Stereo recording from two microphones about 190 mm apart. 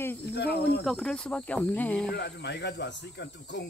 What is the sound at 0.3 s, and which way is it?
Speech, 60° left (ahead or behind).